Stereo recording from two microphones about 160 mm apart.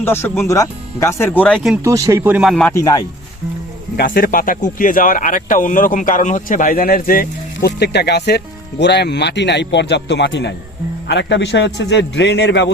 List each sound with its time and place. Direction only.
0.0 s speech: 15° left (ahead or behind)
1.8 s speech: 20° right (ahead or behind)
2.4 s speech: 5° left (ahead or behind)
2.7 s speech: 25° left (ahead or behind)
3.9 s a man's voice: 65° left (ahead or behind); by 12.7 s 90° left